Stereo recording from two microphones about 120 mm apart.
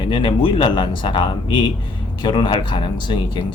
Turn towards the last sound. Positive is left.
turn(degrees=40)  # may be behind; listen again after turning